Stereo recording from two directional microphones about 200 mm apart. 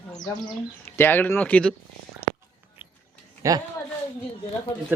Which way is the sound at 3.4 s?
15° right (ahead or behind).